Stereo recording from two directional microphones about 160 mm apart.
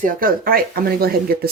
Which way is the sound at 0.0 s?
65° right (ahead or behind).